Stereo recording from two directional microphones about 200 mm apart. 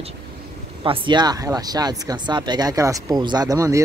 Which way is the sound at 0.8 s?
25° right (ahead or behind).